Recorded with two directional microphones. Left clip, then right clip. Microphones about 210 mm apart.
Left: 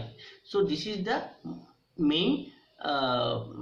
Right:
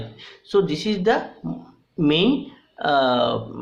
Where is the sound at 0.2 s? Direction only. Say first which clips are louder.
Right 8 dB; 50° right (ahead or behind).